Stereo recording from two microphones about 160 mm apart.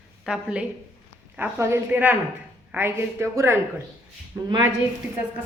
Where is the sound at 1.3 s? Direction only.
15° right (ahead or behind).